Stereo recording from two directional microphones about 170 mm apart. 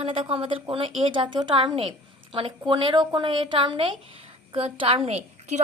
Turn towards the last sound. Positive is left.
turn(degrees=-40)  # may be behind; listen again after turning